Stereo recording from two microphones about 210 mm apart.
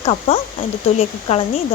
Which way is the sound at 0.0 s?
25° left (ahead or behind).